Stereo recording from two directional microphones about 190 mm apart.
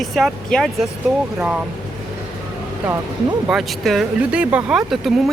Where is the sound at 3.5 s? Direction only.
Centre (ahead or behind).